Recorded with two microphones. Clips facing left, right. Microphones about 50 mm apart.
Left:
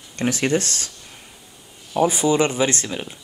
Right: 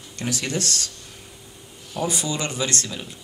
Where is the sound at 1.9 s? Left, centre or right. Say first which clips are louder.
Left 8 dB; left.